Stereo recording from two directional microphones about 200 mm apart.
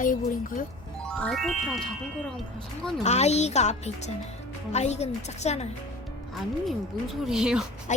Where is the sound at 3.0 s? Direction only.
35° left (ahead or behind).